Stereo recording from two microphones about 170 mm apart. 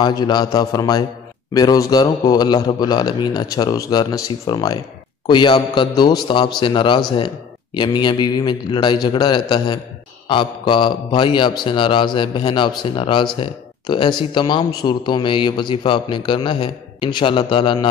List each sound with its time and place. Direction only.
0.0 s a man's voice: 25° left (ahead or behind)